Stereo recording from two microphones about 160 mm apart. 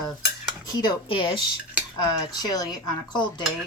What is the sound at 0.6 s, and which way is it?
Speech, 30° left (ahead or behind).